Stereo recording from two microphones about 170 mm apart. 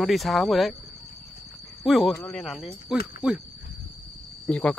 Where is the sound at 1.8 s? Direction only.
Centre (ahead or behind).